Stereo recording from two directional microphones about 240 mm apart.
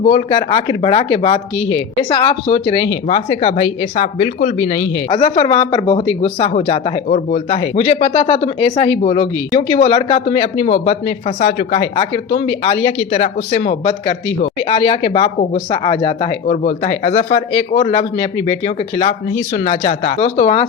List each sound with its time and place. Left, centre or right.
0.0 s speech: left
5.0 s speech: left